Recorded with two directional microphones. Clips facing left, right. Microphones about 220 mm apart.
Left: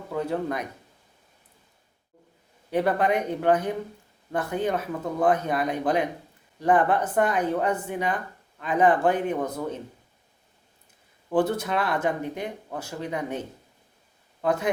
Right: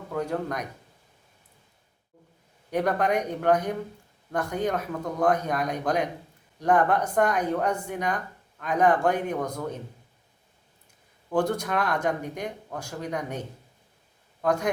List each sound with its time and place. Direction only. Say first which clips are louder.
0.1 s speech: left 2 dB; 5° left (ahead or behind)
2.7 s a man's voice: left 1 dB; 5° left (ahead or behind)
11.3 s speech: left 2 dB; 5° left (ahead or behind)
14.4 s speech: even; 5° left (ahead or behind)